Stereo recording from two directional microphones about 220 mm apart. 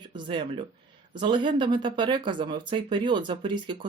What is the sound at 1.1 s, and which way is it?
Speech, 20° right (ahead or behind).